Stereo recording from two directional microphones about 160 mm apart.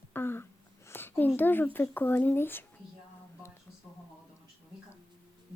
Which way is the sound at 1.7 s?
10° left (ahead or behind).